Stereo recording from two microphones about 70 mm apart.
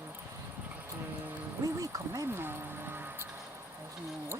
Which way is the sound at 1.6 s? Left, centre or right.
Right.